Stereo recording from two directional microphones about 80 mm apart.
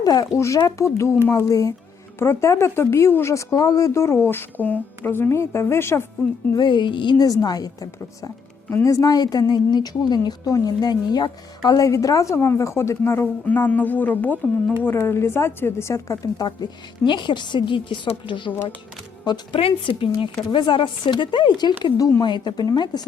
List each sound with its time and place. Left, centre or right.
0.0 s speech: left
0.3 s speech: left
1.3 s a woman's voice: left
2.1 s speech: left
6.6 s speech: left
7.3 s a woman's voice: left
13.5 s speech: left
17.1 s a woman's voice: left
19.3 s a woman's voice: left
19.8 s speech: left
22.6 s a woman's voice: left